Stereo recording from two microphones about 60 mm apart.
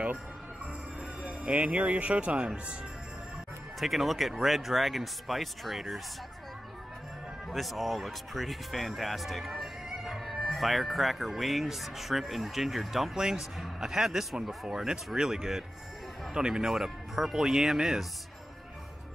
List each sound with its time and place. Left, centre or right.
1.2 s speech: right
3.8 s speech: centre
7.4 s speech: centre